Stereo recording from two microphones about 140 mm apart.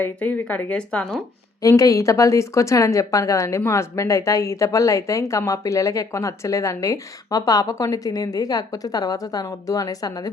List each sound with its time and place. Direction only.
0.0 s speech: 10° left (ahead or behind)
1.6 s a woman's voice: 25° left (ahead or behind)